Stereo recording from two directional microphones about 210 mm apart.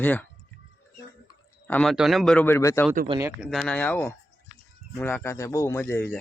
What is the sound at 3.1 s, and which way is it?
Speech, 10° right (ahead or behind).